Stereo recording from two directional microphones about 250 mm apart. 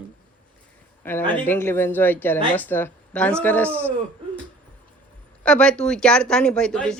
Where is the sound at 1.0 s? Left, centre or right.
Centre.